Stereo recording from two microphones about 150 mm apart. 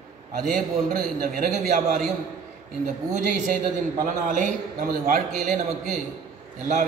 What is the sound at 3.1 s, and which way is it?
A man's voice, 60° right (ahead or behind).